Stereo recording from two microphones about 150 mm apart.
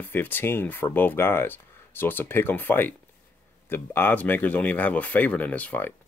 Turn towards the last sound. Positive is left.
turn(degrees=10)  # may be behind; listen again after turning